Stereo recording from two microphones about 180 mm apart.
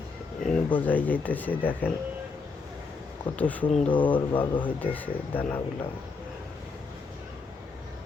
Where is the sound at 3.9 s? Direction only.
25° left (ahead or behind).